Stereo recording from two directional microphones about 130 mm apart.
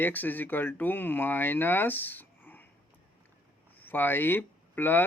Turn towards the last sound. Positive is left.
turn(degrees=15)  # may be behind; listen again after turning